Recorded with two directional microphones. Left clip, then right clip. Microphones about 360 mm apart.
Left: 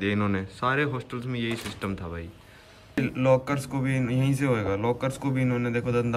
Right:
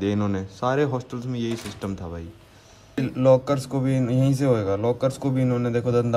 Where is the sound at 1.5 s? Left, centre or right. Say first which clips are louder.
Right 1 dB; centre.